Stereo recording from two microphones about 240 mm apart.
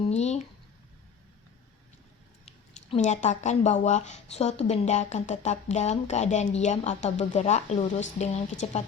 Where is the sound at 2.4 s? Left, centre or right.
Left.